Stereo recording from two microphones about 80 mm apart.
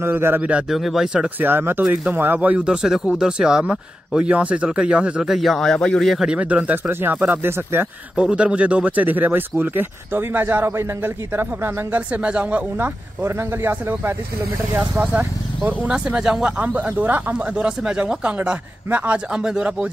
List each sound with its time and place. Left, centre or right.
0.0 s speech: right
0.4 s speech: centre
0.7 s speech: centre
1.4 s speech: right; by 6.1 s centre
6.1 s speech: centre; by 7.9 s right
8.2 s speech: centre
12.1 s speech: centre